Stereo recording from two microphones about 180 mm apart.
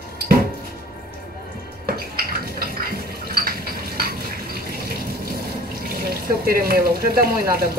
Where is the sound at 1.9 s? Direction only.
55° right (ahead or behind).